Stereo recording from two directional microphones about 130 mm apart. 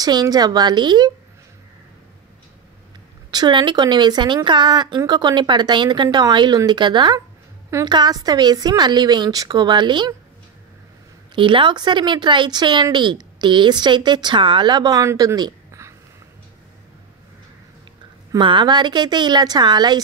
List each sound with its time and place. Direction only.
0.0 s speech: 30° right (ahead or behind)
3.3 s speech: 35° right (ahead or behind)
11.3 s speech: 40° right (ahead or behind)
18.3 s speech: 35° right (ahead or behind)